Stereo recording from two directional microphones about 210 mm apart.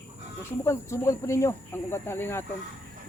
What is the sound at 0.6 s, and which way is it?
Speech, 15° left (ahead or behind).